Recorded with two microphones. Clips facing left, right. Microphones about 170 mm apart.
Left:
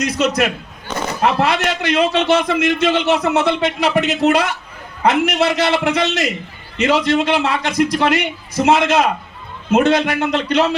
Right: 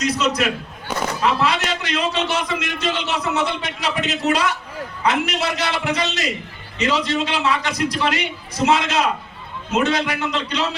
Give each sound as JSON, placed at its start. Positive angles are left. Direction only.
{"t": 0.2, "sound": "a man's voice", "side_deg": 50}